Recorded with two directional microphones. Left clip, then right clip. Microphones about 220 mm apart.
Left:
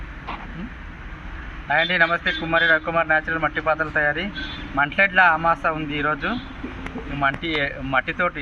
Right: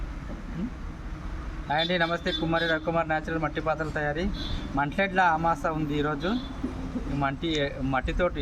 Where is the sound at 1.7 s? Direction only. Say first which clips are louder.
Left 7 dB; 20° right (ahead or behind).